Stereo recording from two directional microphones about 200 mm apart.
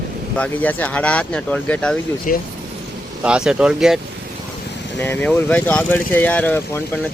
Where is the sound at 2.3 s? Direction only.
40° left (ahead or behind).